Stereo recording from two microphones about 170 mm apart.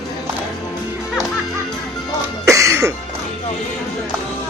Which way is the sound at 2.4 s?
15° right (ahead or behind).